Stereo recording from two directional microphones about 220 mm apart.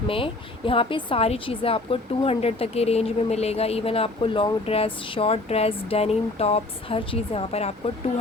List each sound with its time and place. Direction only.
0.1 s speech: 25° left (ahead or behind)